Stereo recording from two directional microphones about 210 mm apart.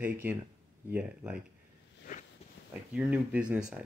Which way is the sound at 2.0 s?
40° left (ahead or behind).